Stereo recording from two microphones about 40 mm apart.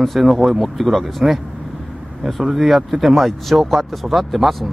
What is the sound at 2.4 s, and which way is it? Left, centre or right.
Speech, centre.